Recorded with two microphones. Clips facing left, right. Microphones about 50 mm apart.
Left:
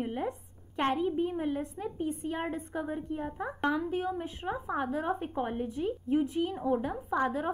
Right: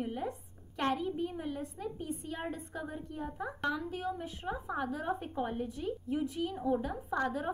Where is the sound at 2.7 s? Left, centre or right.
Left.